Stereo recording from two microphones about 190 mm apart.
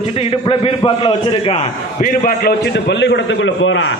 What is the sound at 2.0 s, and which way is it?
A man's voice, 50° left (ahead or behind).